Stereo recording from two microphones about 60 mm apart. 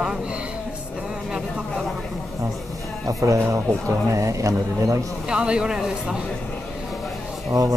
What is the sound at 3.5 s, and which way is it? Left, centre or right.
Speech, right.